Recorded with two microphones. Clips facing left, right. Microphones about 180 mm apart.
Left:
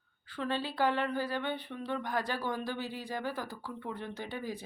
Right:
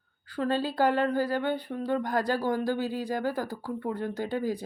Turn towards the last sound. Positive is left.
turn(degrees=-40)  # may be behind; listen again after turning